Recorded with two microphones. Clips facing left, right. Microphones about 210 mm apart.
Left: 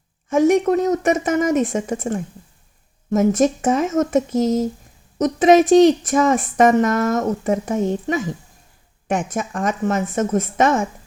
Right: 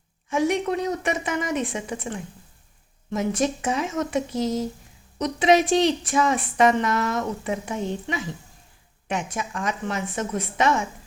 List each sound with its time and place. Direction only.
0.3 s speech: 45° left (ahead or behind)